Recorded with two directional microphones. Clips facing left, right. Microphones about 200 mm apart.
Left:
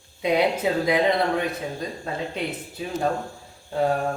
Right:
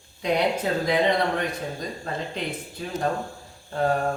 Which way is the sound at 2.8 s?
5° left (ahead or behind).